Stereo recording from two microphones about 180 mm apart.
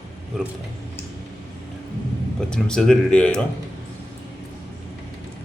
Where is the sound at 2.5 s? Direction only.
5° left (ahead or behind).